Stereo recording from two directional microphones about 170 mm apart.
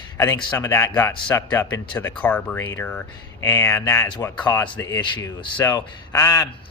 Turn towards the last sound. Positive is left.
turn(degrees=15)  # may be behind; listen again after turning